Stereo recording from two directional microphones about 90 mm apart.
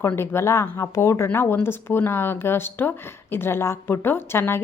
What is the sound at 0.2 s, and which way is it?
A woman's voice, 30° left (ahead or behind).